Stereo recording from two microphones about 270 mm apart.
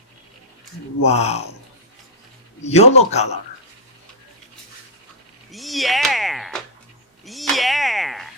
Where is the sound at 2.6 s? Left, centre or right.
Left.